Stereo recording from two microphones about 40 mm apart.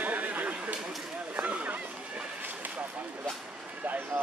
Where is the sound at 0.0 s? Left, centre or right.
Right.